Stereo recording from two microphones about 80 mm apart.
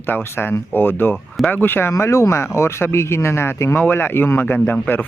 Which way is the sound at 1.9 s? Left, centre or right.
Left.